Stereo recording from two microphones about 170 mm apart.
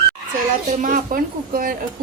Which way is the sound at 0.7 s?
50° right (ahead or behind).